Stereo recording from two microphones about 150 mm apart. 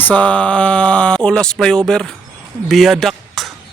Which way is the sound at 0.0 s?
10° left (ahead or behind).